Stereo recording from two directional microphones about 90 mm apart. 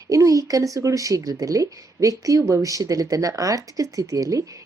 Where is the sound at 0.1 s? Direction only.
35° right (ahead or behind).